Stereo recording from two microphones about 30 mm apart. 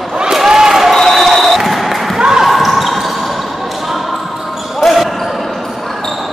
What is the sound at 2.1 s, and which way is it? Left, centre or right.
Basketball bounce, centre.